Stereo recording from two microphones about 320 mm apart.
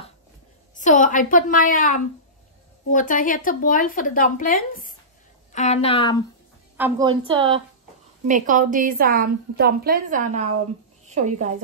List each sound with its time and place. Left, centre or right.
0.7 s a woman's voice: left
6.8 s a woman's voice: centre